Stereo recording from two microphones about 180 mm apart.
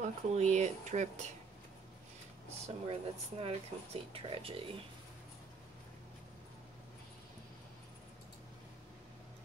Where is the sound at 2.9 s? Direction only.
35° right (ahead or behind).